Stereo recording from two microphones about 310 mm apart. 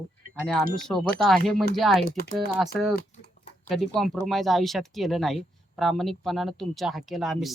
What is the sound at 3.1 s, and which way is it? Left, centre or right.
Typing, left.